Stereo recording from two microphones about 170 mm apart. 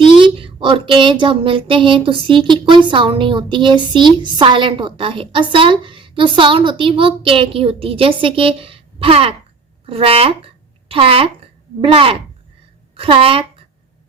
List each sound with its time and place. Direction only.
0.0 s a woman's voice: 30° right (ahead or behind)